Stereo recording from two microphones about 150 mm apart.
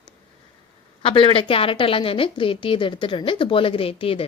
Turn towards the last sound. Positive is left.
turn(degrees=40)  # may be behind; listen again after turning